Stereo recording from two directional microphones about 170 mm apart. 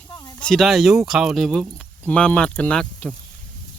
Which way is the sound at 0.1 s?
20° left (ahead or behind).